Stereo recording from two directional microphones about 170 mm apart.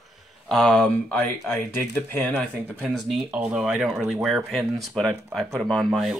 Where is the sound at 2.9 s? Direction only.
Centre (ahead or behind).